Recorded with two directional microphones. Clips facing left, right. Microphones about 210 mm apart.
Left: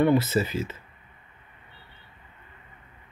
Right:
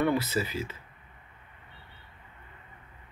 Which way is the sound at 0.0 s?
25° left (ahead or behind).